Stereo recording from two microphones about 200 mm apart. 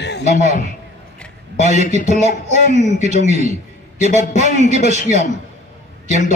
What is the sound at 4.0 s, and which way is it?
A man's voice, 35° left (ahead or behind).